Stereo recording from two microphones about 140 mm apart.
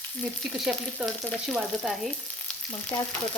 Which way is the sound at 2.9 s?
25° left (ahead or behind).